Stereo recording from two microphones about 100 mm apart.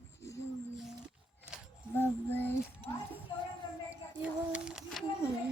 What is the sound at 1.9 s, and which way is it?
Child singing, 20° left (ahead or behind).